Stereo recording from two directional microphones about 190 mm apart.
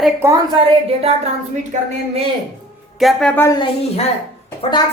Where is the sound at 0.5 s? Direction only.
30° right (ahead or behind).